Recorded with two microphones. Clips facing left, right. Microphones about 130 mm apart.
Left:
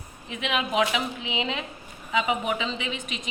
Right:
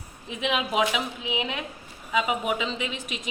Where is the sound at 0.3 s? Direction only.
20° right (ahead or behind).